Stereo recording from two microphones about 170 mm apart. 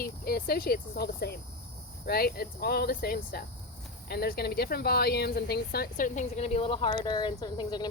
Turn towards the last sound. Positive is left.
turn(degrees=25)  # may be behind; listen again after turning